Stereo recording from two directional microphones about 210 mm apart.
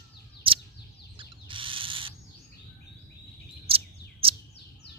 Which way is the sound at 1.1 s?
25° right (ahead or behind).